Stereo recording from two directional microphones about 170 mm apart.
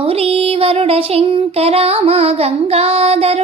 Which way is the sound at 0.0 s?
35° right (ahead or behind).